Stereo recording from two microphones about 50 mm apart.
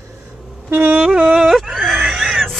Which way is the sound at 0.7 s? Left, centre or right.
Right.